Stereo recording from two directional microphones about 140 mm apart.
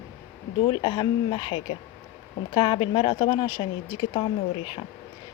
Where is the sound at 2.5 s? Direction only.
35° left (ahead or behind).